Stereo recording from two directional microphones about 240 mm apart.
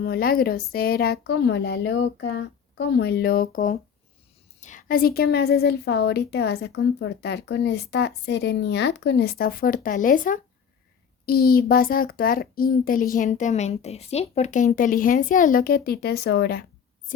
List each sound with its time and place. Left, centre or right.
0.0 s a child's voice: left